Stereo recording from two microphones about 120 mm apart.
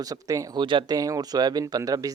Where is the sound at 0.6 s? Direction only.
45° right (ahead or behind).